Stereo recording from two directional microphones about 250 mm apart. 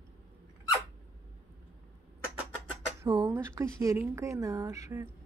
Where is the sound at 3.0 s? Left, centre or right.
Centre.